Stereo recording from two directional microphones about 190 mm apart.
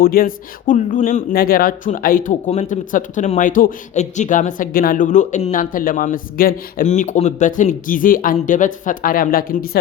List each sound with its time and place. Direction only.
0.0 s speech: 50° left (ahead or behind)